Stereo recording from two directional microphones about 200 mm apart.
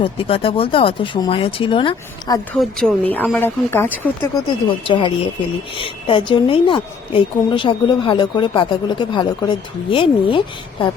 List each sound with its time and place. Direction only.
0.0 s a woman's voice: 30° left (ahead or behind)
2.5 s speech: centre (ahead or behind)
4.9 s a woman's voice: 25° left (ahead or behind)